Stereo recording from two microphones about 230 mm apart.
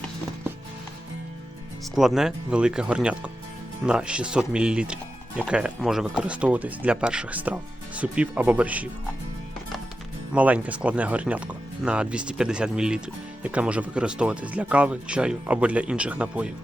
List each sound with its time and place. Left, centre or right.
2.0 s speech: centre
10.3 s speech: centre